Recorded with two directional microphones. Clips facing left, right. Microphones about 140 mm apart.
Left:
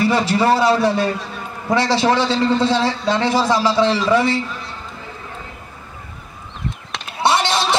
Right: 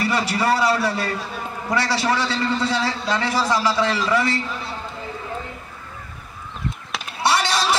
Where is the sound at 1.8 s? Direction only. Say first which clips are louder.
Left 5 dB; 25° left (ahead or behind).